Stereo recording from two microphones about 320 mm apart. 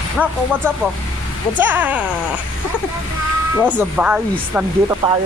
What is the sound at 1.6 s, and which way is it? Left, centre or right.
Speech, centre.